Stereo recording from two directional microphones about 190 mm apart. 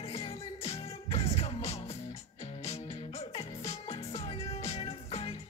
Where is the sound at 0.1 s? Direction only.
30° left (ahead or behind).